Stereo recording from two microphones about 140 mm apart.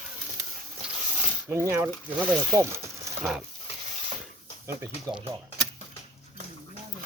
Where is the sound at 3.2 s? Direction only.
5° right (ahead or behind).